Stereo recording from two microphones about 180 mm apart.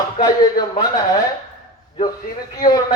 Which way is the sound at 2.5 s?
20° left (ahead or behind).